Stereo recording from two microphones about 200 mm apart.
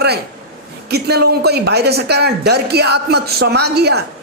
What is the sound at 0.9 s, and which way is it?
A man's voice, 55° right (ahead or behind).